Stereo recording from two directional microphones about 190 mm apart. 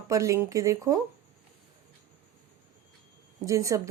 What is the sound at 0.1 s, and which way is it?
Speech, 15° right (ahead or behind).